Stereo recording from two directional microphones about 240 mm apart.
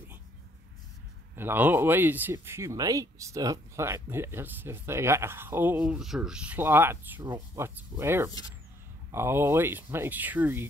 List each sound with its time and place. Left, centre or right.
1.3 s speech: centre